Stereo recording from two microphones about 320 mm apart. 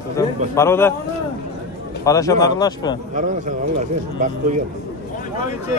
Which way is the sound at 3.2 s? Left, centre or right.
Right.